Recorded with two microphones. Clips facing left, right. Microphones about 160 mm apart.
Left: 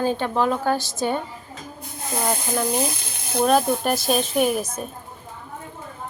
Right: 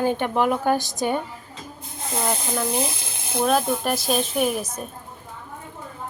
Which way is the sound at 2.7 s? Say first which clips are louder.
Left 1 dB; 25° right (ahead or behind).